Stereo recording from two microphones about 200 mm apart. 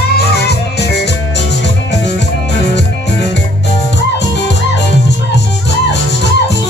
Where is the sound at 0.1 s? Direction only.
55° left (ahead or behind).